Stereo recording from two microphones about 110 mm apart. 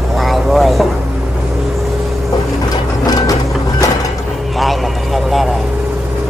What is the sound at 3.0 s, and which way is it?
Vehicle, 35° left (ahead or behind).